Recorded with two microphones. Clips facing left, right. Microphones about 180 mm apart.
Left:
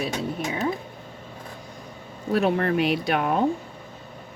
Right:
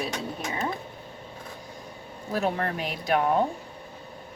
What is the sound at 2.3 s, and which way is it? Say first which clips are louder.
Speech: left 6 dB; 65° left (ahead or behind).